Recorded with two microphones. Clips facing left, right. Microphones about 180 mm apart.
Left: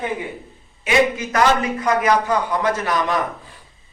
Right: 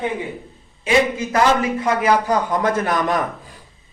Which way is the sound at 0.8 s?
30° right (ahead or behind).